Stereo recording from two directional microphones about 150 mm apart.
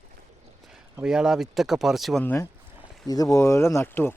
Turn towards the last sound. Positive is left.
turn(degrees=15)  # may be behind; listen again after turning